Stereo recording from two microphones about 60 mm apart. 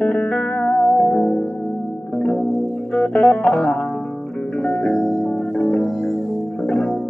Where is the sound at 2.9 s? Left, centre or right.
Centre.